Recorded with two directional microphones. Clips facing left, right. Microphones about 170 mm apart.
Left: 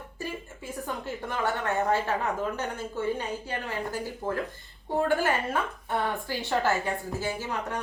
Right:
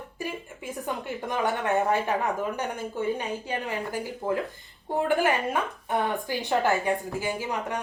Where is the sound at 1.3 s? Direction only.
15° right (ahead or behind).